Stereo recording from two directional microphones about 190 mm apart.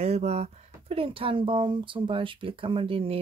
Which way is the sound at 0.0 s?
35° right (ahead or behind).